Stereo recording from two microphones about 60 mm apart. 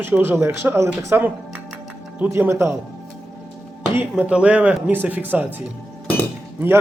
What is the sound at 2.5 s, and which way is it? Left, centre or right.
Speech, right.